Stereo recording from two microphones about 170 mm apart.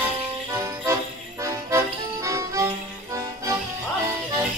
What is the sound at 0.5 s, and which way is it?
Jingle bell, 20° right (ahead or behind).